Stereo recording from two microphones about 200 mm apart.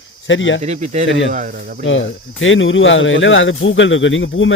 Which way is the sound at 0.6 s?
35° right (ahead or behind).